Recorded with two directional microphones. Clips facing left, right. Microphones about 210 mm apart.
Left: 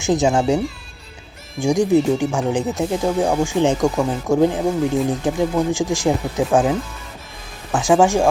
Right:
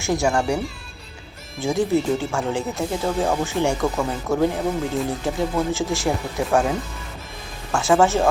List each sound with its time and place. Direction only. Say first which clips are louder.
0.0 s speech: left 4 dB; 20° left (ahead or behind)
1.6 s speech: left 5 dB; 15° left (ahead or behind)